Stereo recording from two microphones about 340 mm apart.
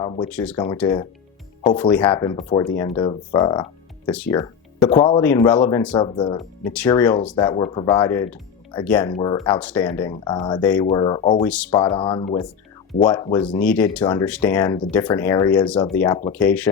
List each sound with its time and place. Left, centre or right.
0.0 s speech: centre
0.5 s speech: centre
11.4 s speech: centre